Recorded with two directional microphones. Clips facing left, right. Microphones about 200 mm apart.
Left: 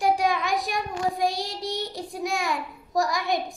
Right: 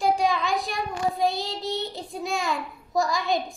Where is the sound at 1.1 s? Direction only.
15° left (ahead or behind).